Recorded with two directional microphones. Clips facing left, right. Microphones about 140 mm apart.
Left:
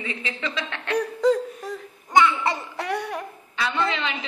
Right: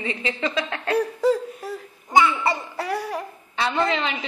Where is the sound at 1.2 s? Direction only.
5° right (ahead or behind).